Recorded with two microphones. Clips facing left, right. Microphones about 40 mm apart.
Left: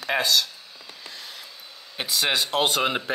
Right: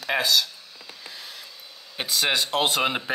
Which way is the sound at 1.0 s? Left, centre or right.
Centre.